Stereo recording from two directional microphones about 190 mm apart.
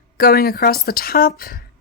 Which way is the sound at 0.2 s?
50° left (ahead or behind).